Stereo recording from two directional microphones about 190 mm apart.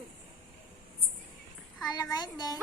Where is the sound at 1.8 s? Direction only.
20° left (ahead or behind).